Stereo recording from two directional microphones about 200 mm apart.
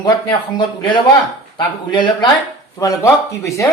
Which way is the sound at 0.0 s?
20° left (ahead or behind).